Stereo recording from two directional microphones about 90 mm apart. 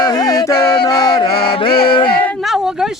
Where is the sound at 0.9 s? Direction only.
50° left (ahead or behind); by 2.0 s 75° left (ahead or behind).